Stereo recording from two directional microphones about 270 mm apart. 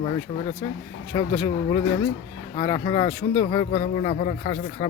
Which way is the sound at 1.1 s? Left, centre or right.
Centre.